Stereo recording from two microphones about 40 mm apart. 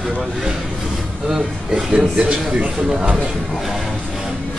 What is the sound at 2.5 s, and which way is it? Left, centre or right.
Speech, right.